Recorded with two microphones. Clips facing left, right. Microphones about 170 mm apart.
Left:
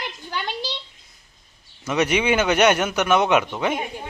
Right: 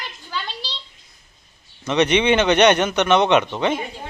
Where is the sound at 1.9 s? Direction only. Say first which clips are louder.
Right 3 dB; 5° left (ahead or behind).